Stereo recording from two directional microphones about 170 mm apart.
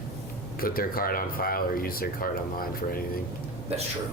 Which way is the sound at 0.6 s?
60° left (ahead or behind).